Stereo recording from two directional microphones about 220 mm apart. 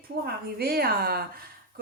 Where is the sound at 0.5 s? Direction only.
45° right (ahead or behind).